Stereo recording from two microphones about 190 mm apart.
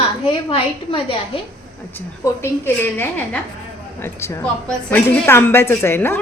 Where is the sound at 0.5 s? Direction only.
30° left (ahead or behind).